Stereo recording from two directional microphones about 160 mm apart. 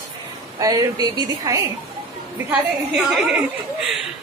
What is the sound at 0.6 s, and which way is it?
A woman's voice, 20° right (ahead or behind).